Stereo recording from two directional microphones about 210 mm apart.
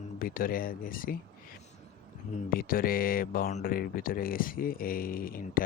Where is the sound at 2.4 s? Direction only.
45° left (ahead or behind).